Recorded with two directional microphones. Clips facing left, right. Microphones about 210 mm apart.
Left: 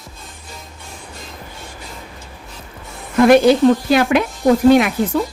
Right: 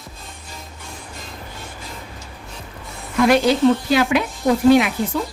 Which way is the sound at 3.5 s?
50° left (ahead or behind).